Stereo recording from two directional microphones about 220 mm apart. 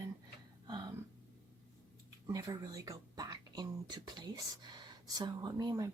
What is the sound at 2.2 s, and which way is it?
Speech, 15° right (ahead or behind).